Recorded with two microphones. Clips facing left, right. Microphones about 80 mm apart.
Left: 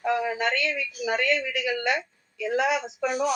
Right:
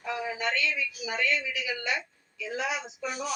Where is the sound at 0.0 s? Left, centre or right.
Left.